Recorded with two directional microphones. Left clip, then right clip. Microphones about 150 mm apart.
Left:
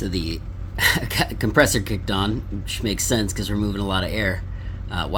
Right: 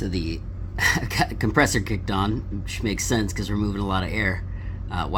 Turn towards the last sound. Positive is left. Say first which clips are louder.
# left 1 dB
turn(degrees=5)  # may be behind; listen again after turning